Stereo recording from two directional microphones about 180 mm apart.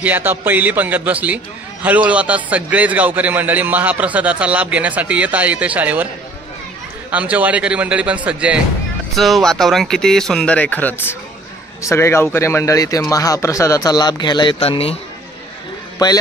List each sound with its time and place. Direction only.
0.0 s a man's voice: 10° right (ahead or behind)
7.1 s a man's voice: 10° right (ahead or behind); by 15.0 s 35° left (ahead or behind)
16.0 s speech: 20° left (ahead or behind)